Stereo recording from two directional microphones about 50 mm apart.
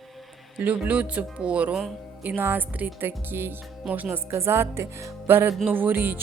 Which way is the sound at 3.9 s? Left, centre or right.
Right.